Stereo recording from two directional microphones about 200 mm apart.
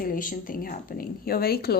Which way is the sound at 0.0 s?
45° left (ahead or behind).